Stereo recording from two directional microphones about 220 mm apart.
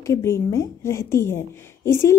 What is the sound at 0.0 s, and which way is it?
A woman's voice, 15° left (ahead or behind).